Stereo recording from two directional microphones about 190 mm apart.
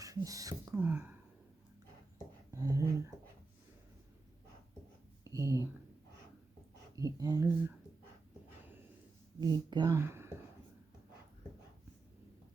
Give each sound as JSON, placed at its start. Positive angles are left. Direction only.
{"t": 0.0, "sound": "speech", "side_deg": -15}
{"t": 2.5, "sound": "speech", "side_deg": -20}
{"t": 5.2, "sound": "a sound", "side_deg": -15}
{"t": 6.9, "sound": "speech", "side_deg": -20}
{"t": 9.4, "sound": "speech", "side_deg": -20}